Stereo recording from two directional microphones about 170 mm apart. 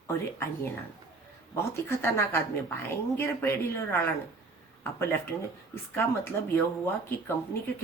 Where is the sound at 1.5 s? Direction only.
15° left (ahead or behind).